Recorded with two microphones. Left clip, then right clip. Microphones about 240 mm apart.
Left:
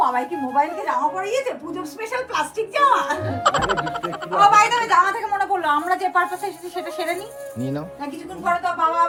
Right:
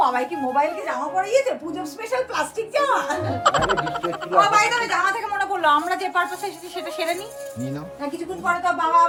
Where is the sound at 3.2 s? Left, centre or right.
Centre.